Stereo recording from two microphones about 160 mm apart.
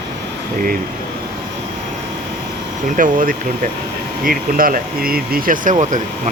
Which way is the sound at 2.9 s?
55° right (ahead or behind).